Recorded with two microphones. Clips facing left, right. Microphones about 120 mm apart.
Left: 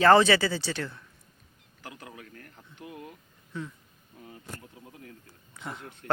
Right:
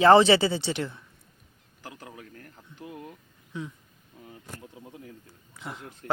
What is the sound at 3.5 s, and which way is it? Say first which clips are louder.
Speech: right 1 dB; 15° right (ahead or behind).